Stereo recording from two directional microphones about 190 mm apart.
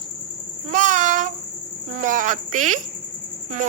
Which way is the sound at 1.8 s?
45° right (ahead or behind).